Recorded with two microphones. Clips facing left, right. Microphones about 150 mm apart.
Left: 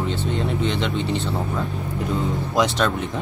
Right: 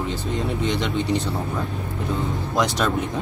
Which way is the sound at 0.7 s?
Centre (ahead or behind).